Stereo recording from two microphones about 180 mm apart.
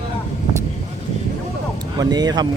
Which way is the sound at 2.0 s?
20° right (ahead or behind).